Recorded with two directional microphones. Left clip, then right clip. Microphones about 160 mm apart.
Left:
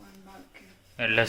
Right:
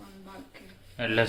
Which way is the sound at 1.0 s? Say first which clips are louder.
Left 2 dB; 20° left (ahead or behind).